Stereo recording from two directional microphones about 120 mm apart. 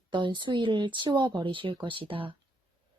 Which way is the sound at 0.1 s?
40° right (ahead or behind).